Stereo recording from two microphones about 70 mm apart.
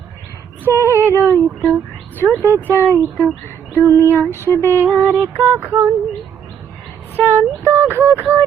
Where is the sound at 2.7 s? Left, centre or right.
Left.